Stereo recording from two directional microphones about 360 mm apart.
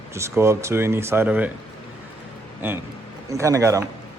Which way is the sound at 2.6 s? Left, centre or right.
Centre.